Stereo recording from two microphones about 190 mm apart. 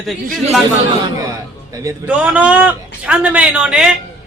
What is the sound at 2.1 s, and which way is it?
Speech, 5° right (ahead or behind).